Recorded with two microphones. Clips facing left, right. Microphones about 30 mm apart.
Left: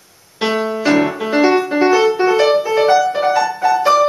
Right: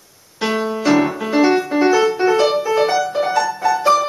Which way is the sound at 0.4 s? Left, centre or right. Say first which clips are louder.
Left 2 dB; centre.